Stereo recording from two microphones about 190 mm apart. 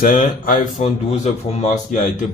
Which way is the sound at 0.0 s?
45° left (ahead or behind).